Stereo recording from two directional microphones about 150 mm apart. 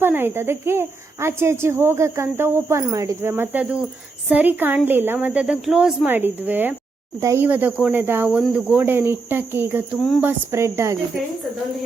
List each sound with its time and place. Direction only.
0.0 s speech: 15° right (ahead or behind)